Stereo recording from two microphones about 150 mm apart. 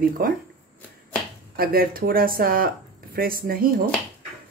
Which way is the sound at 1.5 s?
80° right.